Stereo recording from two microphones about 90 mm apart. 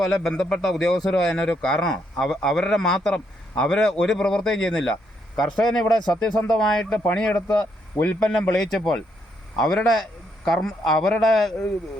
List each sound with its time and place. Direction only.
0.0 s a man's voice: 5° left (ahead or behind)